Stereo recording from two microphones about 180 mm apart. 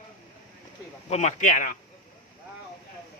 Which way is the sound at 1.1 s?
40° left (ahead or behind).